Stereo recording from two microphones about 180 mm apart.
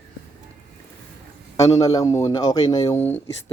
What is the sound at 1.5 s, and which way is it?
A man's voice, 20° left (ahead or behind).